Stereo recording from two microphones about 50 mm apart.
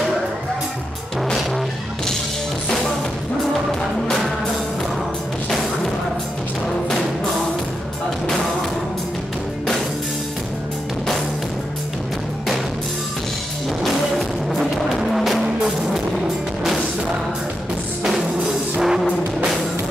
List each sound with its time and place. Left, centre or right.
13.8 s music: centre
18.8 s music: centre